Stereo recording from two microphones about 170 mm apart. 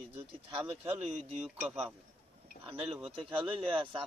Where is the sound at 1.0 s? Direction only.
40° right (ahead or behind).